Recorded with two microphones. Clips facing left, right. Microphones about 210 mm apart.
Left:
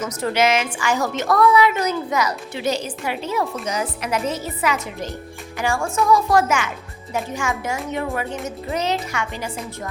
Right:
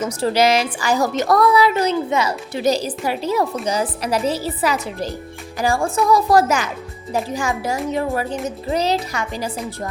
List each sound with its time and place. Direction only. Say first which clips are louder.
0.0 s a woman's voice: right 3 dB; 30° right (ahead or behind)